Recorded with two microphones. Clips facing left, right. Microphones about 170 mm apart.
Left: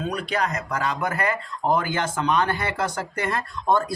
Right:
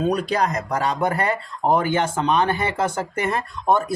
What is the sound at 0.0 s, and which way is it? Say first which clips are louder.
Speech: right 5 dB; 35° right (ahead or behind).